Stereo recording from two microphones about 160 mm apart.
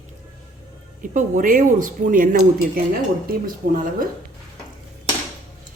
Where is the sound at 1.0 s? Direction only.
55° right (ahead or behind).